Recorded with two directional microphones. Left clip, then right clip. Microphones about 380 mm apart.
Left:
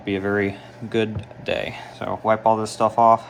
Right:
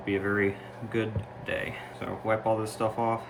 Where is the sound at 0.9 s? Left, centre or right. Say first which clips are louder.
Left 8 dB; centre.